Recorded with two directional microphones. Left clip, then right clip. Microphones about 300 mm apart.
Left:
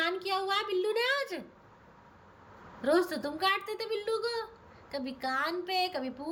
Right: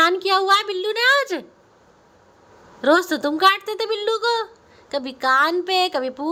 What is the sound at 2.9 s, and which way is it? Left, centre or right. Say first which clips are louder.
Speech: right 10 dB; centre.